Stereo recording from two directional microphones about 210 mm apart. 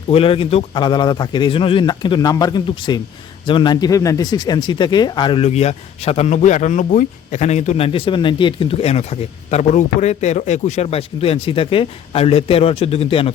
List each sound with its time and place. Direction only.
0.1 s speech: 25° left (ahead or behind)